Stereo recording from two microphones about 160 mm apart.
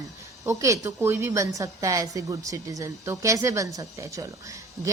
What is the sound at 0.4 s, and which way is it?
A woman's voice, 20° right (ahead or behind).